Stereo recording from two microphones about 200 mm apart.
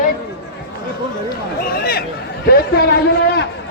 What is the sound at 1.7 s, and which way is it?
Speech, 50° left (ahead or behind).